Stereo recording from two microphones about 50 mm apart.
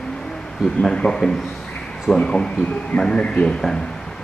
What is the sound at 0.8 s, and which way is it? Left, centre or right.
A man's voice, centre.